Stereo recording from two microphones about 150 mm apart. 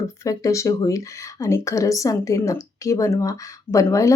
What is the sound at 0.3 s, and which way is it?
Speech, 20° left (ahead or behind).